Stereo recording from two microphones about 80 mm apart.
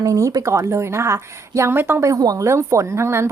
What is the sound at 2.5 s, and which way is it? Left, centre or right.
Speech, right.